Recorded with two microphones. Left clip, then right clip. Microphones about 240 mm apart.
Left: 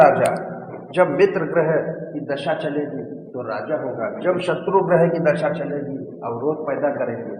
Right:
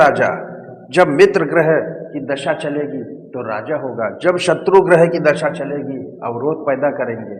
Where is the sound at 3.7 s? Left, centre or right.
Right.